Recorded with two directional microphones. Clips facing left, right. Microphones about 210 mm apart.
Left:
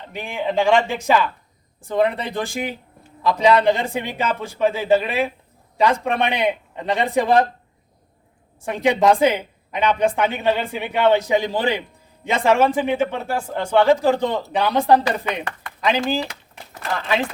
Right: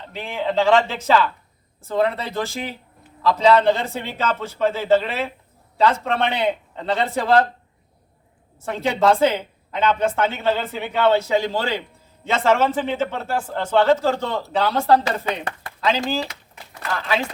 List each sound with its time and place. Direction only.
0.1 s a woman's voice: 15° left (ahead or behind)
8.6 s a woman's voice: 15° left (ahead or behind)